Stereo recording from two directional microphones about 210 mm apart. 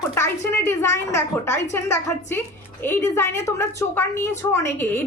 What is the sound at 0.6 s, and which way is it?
A woman's voice, 10° left (ahead or behind).